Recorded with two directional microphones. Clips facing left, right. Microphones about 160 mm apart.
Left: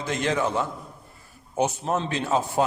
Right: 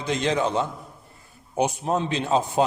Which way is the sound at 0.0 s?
20° right (ahead or behind).